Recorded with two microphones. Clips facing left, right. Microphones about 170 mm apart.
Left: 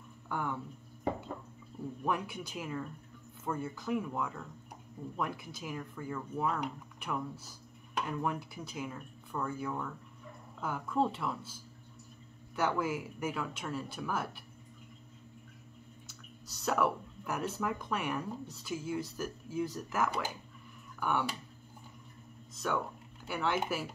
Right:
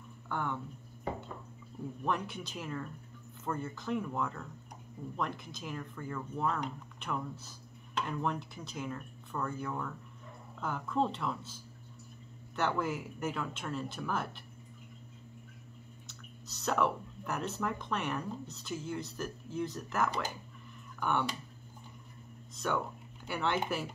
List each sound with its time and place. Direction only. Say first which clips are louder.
0.3 s speech: even; 10° left (ahead or behind)
2.0 s speech: even; 10° left (ahead or behind)
12.5 s speech: left 1 dB; 5° left (ahead or behind)
16.1 s speech: right 1 dB; 5° left (ahead or behind)
22.6 s speech: even; centre (ahead or behind)